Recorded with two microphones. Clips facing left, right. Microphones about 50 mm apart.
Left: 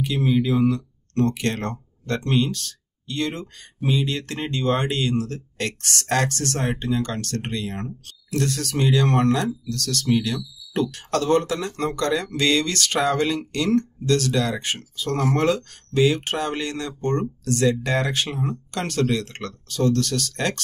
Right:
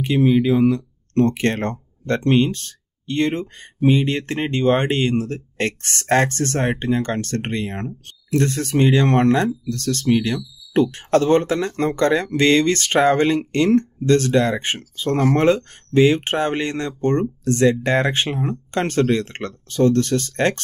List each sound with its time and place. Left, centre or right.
0.0 s speech: right